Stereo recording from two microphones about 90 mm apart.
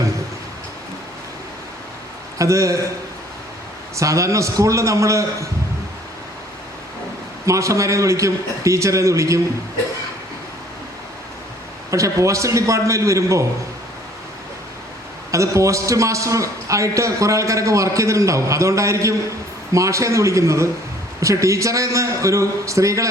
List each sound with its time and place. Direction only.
2.4 s a man's voice: 35° right (ahead or behind)
3.9 s a man's voice: 35° right (ahead or behind)
7.4 s a man's voice: 35° right (ahead or behind)
11.9 s a man's voice: 35° right (ahead or behind)
15.3 s a man's voice: 35° right (ahead or behind)